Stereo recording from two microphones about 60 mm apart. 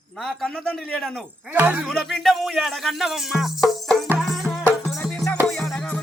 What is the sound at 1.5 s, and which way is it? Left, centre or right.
Speech, right.